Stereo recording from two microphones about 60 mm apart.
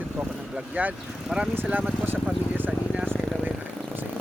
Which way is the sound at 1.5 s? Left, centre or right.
Right.